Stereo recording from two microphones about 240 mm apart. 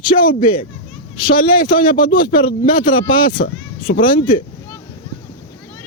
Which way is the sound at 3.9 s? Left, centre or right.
Left.